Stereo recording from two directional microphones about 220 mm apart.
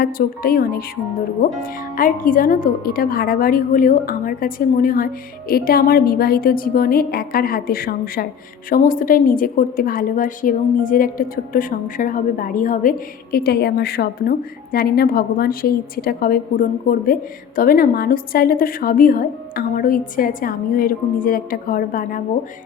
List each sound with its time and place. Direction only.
0.0 s a woman's voice: 40° left (ahead or behind)